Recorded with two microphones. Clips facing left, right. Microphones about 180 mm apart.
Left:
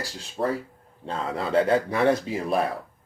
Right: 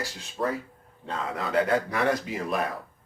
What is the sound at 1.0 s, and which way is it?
A man's voice, 30° left (ahead or behind).